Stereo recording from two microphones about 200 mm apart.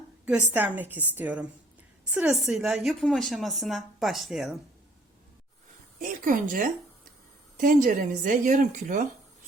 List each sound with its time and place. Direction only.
0.5 s a woman's voice: 10° right (ahead or behind)
6.0 s speech: 45° right (ahead or behind)